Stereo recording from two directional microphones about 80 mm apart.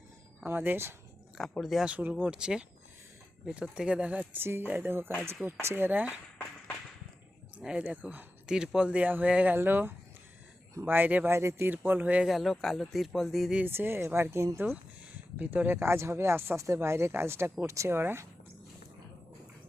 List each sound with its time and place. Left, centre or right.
0.4 s speech: right
1.4 s speech: centre
1.9 s speech: right
2.3 s speech: centre
7.6 s speech: centre
11.3 s speech: right
11.7 s speech: right
12.3 s speech: centre
13.7 s speech: right